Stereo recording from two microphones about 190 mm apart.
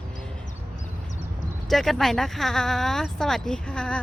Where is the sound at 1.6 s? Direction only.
Centre (ahead or behind).